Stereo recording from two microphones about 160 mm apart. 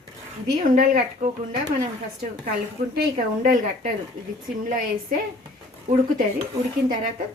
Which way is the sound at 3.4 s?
60° right (ahead or behind).